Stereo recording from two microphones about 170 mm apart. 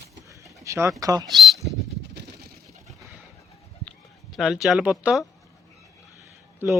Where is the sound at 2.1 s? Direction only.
80° right.